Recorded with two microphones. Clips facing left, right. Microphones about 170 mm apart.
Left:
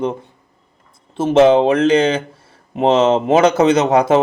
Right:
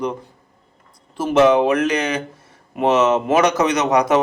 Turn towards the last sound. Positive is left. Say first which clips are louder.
# left 3 dB
turn(degrees=25)  # may be behind; listen again after turning